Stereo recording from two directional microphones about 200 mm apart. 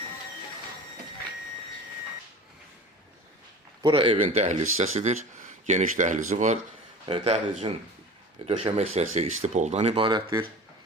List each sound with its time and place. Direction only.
3.8 s a man's voice: 25° right (ahead or behind)